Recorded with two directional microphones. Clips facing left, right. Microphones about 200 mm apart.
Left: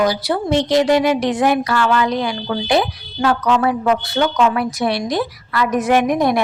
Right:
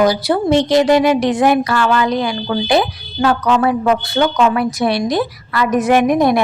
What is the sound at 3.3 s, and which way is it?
A woman's voice, 50° right (ahead or behind).